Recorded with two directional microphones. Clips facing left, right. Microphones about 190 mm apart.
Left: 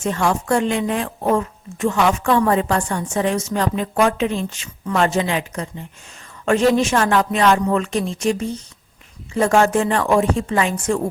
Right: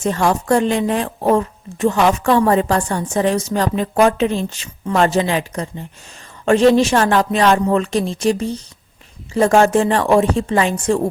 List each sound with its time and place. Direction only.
0.0 s speech: 35° right (ahead or behind)